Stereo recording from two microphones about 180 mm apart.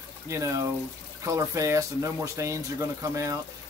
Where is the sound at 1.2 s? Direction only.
15° right (ahead or behind).